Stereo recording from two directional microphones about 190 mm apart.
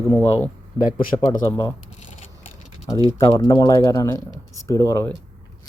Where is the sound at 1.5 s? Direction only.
20° left (ahead or behind).